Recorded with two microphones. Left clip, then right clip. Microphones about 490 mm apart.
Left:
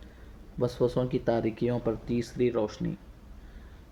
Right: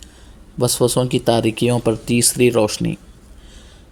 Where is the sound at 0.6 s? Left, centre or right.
Left.